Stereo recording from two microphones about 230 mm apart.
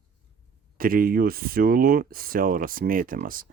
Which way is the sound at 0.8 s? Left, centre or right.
Right.